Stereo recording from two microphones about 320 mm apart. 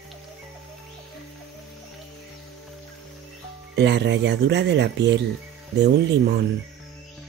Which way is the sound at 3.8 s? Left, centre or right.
Right.